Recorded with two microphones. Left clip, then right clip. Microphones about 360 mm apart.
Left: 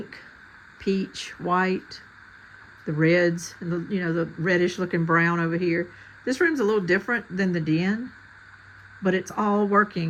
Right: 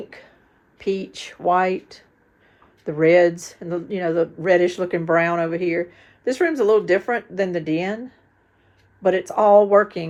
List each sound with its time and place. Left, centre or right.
0.8 s speech: centre
3.0 s speech: centre
9.0 s speech: centre
9.5 s speech: right